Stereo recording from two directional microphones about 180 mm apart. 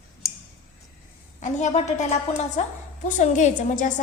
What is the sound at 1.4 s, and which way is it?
Speech, 40° left (ahead or behind).